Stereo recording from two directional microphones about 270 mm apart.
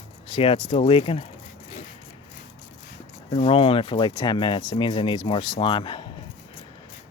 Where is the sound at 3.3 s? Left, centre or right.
Centre.